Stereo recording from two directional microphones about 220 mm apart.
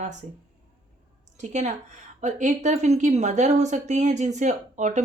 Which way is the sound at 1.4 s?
30° right (ahead or behind).